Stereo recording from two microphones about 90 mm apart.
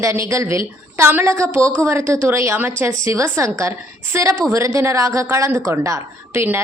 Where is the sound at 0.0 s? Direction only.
35° right (ahead or behind).